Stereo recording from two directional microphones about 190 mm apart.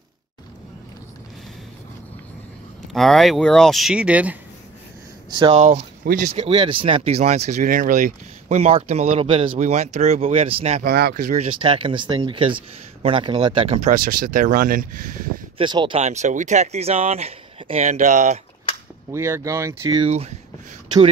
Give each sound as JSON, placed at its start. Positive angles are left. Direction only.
{"t": 2.9, "sound": "speech", "side_deg": 0}
{"t": 5.3, "sound": "speech", "side_deg": -25}
{"t": 5.6, "sound": "speech", "side_deg": -40}
{"t": 6.3, "sound": "speech", "side_deg": -30}
{"t": 10.9, "sound": "speech", "side_deg": -55}
{"t": 13.8, "sound": "speech", "side_deg": -45}
{"t": 15.5, "sound": "speech", "side_deg": -25}
{"t": 16.0, "sound": "speech", "side_deg": -35}
{"t": 19.1, "sound": "speech", "side_deg": -15}
{"t": 20.0, "sound": "speech", "side_deg": -35}